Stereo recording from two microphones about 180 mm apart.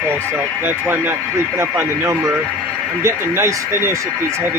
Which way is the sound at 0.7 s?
10° right (ahead or behind).